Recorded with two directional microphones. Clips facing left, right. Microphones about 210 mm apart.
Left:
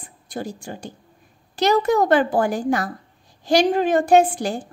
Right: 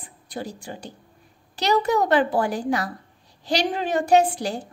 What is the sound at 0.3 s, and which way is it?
A woman's voice, 45° left (ahead or behind).